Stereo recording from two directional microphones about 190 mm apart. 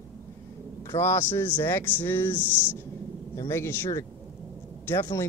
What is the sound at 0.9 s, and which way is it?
Speech, 15° left (ahead or behind).